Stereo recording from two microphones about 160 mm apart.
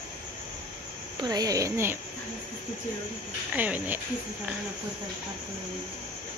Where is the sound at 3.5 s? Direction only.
10° right (ahead or behind).